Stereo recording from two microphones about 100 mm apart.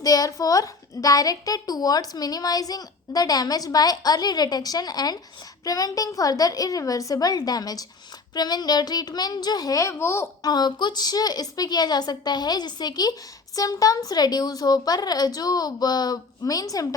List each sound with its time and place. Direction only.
0.0 s a woman's voice: 40° left (ahead or behind)
10.4 s a woman's voice: 45° left (ahead or behind)